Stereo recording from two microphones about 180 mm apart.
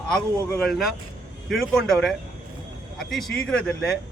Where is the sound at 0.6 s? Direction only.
Centre (ahead or behind).